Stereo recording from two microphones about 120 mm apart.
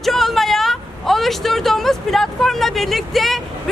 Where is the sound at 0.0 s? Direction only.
Centre (ahead or behind).